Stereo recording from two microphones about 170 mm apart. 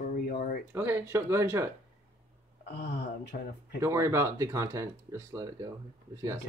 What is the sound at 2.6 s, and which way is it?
Speech, 75° left (ahead or behind).